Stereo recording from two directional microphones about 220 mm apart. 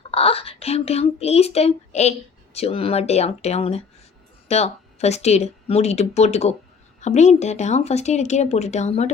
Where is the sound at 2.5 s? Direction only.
25° left (ahead or behind).